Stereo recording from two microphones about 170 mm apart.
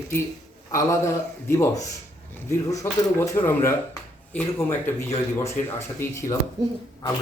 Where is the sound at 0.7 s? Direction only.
15° left (ahead or behind).